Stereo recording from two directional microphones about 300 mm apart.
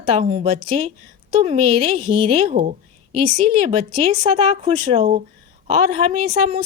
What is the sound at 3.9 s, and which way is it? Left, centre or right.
A woman's voice, centre.